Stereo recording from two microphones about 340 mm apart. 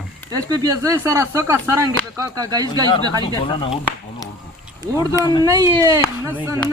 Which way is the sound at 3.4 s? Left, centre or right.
Centre.